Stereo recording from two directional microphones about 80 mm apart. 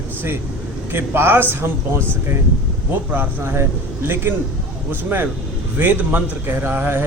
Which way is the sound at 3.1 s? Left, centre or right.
Right.